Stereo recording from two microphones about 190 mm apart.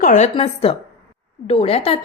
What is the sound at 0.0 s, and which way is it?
A woman's voice, 40° left (ahead or behind).